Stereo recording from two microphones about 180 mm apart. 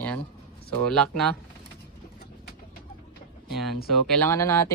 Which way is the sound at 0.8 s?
5° left (ahead or behind).